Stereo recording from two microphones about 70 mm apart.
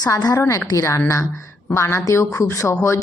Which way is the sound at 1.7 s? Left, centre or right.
Left.